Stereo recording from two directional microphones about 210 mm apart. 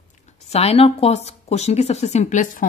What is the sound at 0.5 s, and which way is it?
Speech, 30° left (ahead or behind).